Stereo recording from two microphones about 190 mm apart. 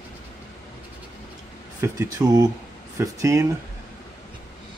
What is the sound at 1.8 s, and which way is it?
Speech, 15° right (ahead or behind).